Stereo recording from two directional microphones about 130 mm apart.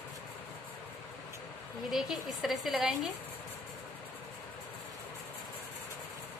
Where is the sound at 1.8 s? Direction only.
Centre (ahead or behind).